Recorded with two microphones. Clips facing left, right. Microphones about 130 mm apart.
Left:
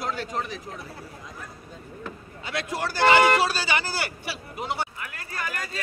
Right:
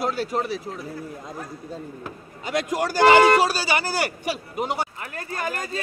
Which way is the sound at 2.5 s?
45° right (ahead or behind).